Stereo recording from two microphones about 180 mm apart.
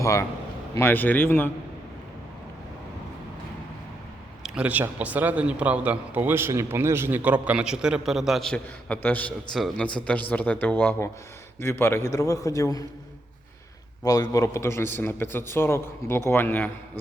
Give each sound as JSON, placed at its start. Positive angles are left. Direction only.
{"t": 0.0, "sound": "a man's voice", "side_deg": 15}
{"t": 4.4, "sound": "a man's voice", "side_deg": -5}
{"t": 14.0, "sound": "a man's voice", "side_deg": 20}